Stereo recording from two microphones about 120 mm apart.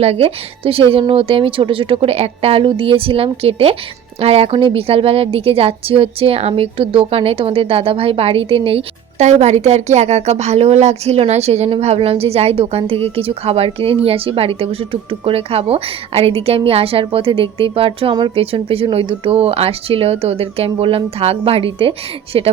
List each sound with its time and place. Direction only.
0.0 s speech: 55° right (ahead or behind)
9.2 s a woman's voice: 70° right (ahead or behind); by 22.4 s 50° right (ahead or behind)